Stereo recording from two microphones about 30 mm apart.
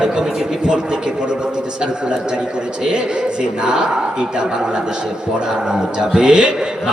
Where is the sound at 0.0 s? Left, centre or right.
Right.